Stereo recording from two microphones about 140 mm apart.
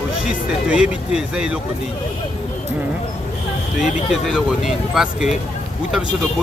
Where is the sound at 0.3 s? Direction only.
10° right (ahead or behind).